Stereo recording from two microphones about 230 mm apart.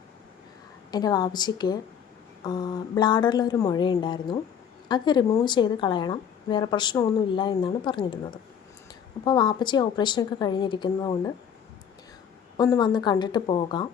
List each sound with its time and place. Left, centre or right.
0.9 s a woman's voice: centre
12.5 s a woman's voice: centre